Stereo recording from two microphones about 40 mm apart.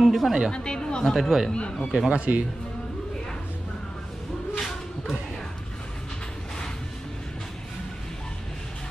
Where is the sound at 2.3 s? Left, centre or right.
Right.